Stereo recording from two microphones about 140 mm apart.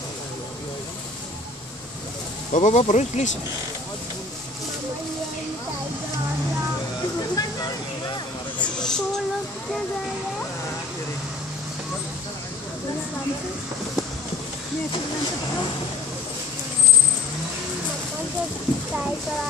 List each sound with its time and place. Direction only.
2.5 s speech: 60° left (ahead or behind)
7.2 s vehicle: 25° left (ahead or behind)
8.5 s a sound: 5° left (ahead or behind)